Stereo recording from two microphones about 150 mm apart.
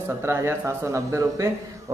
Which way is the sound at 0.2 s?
15° right (ahead or behind).